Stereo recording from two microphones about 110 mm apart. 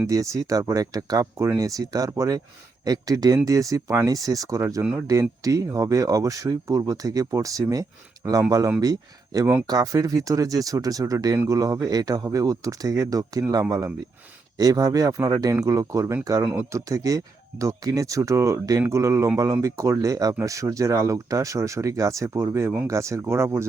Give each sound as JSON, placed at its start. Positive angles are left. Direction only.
{"t": 0.1, "sound": "speech", "side_deg": -30}